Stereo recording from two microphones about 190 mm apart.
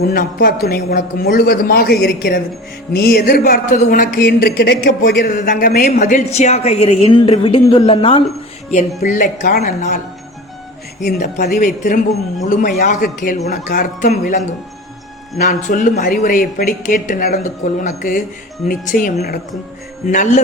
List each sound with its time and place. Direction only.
0.0 s a man's voice: 50° left (ahead or behind); by 8.2 s 30° left (ahead or behind)
9.0 s a man's voice: 40° left (ahead or behind)
11.0 s a man's voice: 50° left (ahead or behind)